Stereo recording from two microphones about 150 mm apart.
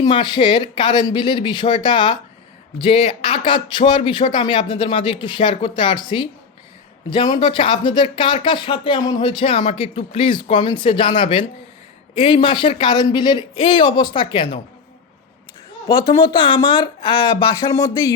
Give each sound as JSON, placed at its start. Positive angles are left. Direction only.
{"t": 0.1, "sound": "speech", "side_deg": 30}
{"t": 15.9, "sound": "speech", "side_deg": 30}